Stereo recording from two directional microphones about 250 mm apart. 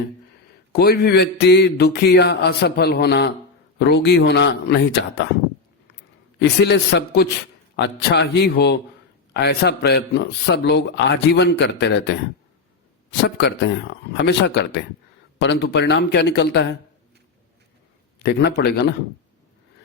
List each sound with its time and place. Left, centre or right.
0.7 s speech: left
6.4 s speech: left
13.2 s speech: left
18.2 s speech: left